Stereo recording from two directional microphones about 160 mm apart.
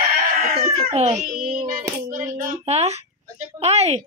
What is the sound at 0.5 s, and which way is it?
Speech, 40° right (ahead or behind).